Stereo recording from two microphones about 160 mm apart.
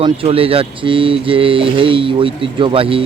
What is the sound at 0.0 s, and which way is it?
Speech, 35° right (ahead or behind).